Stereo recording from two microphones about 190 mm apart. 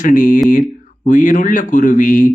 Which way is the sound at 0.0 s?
45° left (ahead or behind).